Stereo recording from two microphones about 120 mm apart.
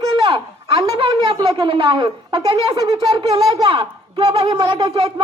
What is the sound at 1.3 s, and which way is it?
A woman's voice, 35° right (ahead or behind).